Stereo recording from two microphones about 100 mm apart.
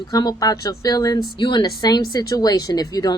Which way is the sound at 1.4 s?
50° left (ahead or behind).